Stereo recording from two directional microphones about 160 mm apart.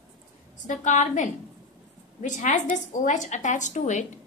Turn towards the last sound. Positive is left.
turn(degrees=50)  # may be behind; listen again after turning